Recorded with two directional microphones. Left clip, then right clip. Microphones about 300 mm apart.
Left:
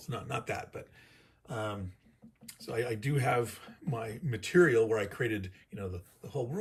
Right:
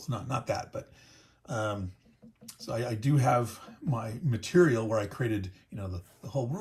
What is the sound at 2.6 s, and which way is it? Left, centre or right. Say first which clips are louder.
Speech: even; centre.